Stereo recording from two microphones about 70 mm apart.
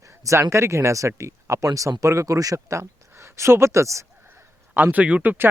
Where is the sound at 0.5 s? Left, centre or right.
Right.